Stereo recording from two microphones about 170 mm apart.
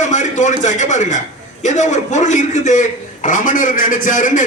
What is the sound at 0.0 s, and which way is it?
A man's voice, 45° left (ahead or behind).